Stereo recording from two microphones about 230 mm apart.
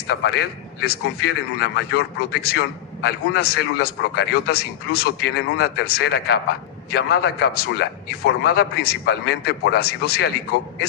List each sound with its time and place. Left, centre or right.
0.1 s a man's voice: left